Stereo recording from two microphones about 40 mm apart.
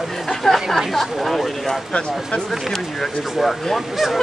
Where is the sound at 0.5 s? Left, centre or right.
Centre.